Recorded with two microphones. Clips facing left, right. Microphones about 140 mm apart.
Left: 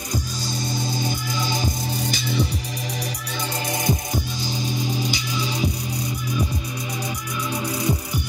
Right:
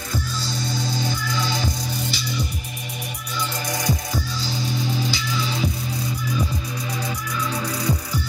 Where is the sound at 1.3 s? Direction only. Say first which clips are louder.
Right 1 dB; 20° left (ahead or behind).